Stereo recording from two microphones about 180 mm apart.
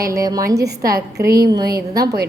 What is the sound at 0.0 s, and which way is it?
Speech, 20° right (ahead or behind).